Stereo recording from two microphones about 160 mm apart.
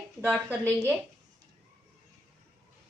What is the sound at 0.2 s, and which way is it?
Speech, 10° right (ahead or behind).